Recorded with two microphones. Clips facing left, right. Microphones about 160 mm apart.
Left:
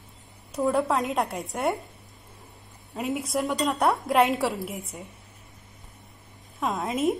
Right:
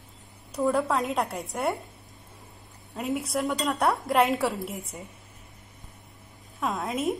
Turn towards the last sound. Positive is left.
turn(degrees=0)  # may be behind; listen again after turning